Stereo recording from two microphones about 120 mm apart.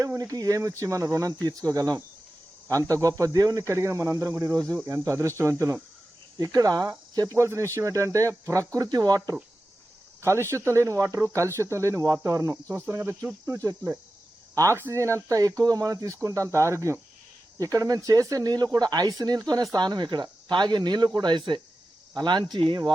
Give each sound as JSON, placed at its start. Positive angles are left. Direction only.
{"t": 0.0, "sound": "speech", "side_deg": -25}
{"t": 12.8, "sound": "cricket", "side_deg": -15}
{"t": 14.5, "sound": "speech", "side_deg": -25}